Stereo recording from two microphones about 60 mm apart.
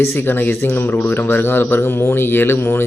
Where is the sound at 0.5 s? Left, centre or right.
Left.